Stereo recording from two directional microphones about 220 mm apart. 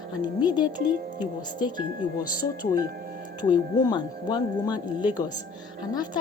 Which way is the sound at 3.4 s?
20° left (ahead or behind).